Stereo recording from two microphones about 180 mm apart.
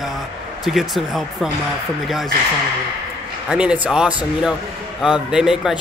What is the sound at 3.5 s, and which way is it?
A man's voice, 5° right (ahead or behind).